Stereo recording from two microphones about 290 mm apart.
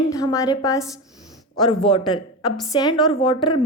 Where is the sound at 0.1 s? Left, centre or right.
Centre.